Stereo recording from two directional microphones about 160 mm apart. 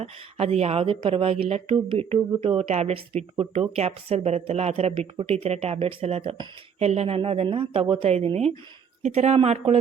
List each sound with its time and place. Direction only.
0.0 s speech: 40° right (ahead or behind)